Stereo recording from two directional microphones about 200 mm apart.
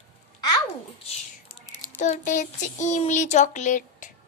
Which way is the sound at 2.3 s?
35° left (ahead or behind).